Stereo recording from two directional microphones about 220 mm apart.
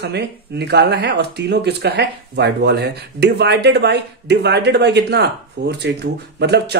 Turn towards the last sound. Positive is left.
turn(degrees=-50)  # may be behind; listen again after turning